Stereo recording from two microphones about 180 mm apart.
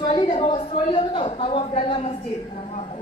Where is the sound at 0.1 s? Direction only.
30° left (ahead or behind).